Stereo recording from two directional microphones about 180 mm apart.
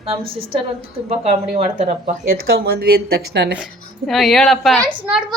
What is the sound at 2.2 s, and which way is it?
Speech, 55° right (ahead or behind).